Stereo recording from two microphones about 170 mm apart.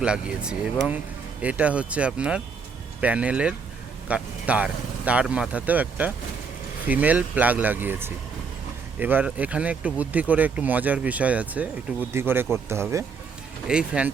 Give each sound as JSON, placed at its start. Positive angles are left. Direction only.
{"t": 0.0, "sound": "speech", "side_deg": -5}
{"t": 13.7, "sound": "speech", "side_deg": -5}